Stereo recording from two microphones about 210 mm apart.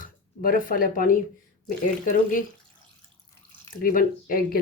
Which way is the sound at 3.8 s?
40° left (ahead or behind).